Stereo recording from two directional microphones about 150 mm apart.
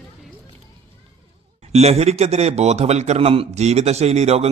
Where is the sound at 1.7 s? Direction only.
45° right (ahead or behind).